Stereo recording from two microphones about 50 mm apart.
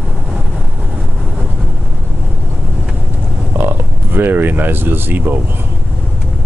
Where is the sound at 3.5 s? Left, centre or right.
Right.